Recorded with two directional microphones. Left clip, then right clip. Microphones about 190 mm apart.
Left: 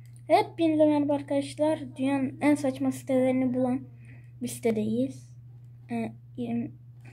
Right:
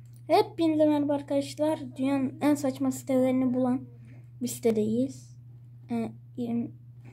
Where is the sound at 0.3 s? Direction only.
15° right (ahead or behind).